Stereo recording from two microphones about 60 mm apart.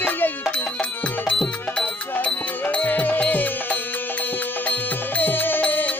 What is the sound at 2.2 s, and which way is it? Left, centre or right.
Music, left.